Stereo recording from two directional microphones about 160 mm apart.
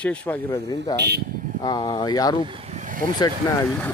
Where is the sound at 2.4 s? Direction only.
35° right (ahead or behind); by 3.0 s 50° right (ahead or behind).